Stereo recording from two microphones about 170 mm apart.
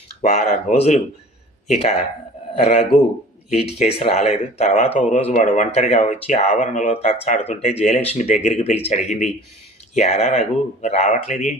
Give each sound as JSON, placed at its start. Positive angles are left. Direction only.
{"t": 0.2, "sound": "speech", "side_deg": 45}
{"t": 3.5, "sound": "speech", "side_deg": 40}